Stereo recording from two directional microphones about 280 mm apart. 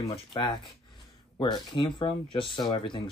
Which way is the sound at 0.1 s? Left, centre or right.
Centre.